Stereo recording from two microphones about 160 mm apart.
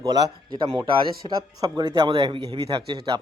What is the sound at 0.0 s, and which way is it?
Speech, 25° right (ahead or behind).